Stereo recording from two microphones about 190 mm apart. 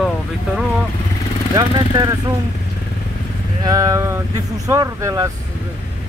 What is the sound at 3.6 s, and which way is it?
Speech, 20° right (ahead or behind).